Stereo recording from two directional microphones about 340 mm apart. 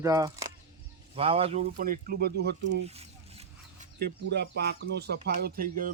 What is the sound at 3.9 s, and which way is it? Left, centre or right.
Speech, right.